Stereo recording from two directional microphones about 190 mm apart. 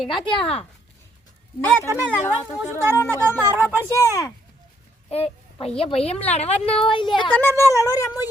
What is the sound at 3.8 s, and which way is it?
Speech, 15° left (ahead or behind).